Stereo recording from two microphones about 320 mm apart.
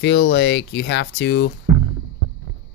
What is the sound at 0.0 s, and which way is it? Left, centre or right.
Speech, left.